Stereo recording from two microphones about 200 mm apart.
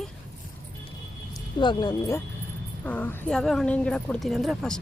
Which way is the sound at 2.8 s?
5° left (ahead or behind).